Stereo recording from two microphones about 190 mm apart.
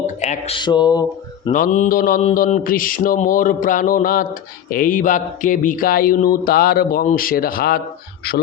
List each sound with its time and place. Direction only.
0.2 s speech: 35° left (ahead or behind)
1.5 s speech: 45° left (ahead or behind)